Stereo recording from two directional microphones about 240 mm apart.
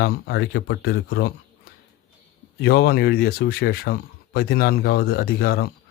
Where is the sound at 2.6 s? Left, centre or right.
Left.